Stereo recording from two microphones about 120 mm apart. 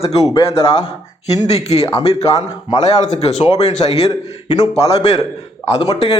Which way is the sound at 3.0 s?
75° left (ahead or behind).